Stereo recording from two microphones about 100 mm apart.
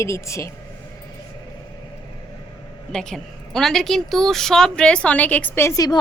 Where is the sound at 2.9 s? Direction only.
5° left (ahead or behind).